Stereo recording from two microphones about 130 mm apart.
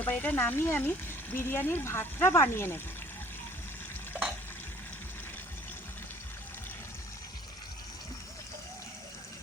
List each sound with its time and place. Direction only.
0.0 s speech: 15° left (ahead or behind)